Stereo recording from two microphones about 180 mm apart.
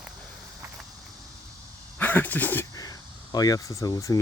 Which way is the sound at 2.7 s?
20° left (ahead or behind).